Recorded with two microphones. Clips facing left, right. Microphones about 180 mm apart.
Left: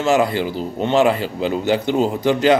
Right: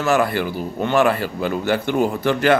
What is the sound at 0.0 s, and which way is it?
A man's voice, 20° left (ahead or behind).